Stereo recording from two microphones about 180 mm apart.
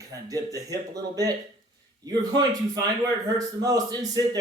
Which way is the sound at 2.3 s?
20° right (ahead or behind).